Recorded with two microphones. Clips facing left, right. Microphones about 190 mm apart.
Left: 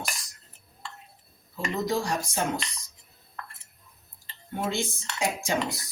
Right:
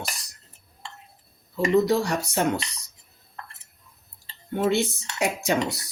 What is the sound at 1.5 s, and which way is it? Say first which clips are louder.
Speech: right 8 dB; 65° right (ahead or behind).